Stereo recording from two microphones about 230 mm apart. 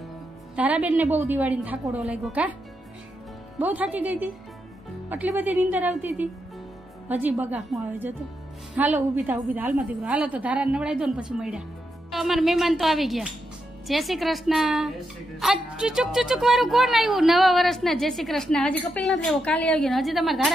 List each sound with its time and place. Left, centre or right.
0.6 s a woman's voice: centre
3.5 s a woman's voice: centre